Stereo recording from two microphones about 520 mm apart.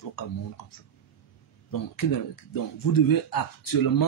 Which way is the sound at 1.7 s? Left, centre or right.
Left.